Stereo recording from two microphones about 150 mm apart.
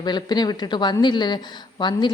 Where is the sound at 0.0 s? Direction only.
30° left (ahead or behind).